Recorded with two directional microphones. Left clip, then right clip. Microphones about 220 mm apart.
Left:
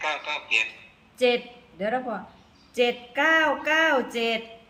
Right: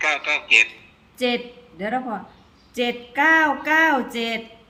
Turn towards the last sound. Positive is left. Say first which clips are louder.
# right 1 dB
turn(degrees=0)  # may be behind; listen again after turning